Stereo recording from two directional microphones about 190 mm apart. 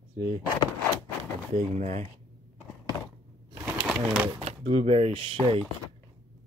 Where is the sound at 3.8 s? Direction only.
5° right (ahead or behind).